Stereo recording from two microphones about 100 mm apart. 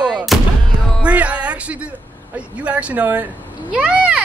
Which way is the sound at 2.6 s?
15° right (ahead or behind).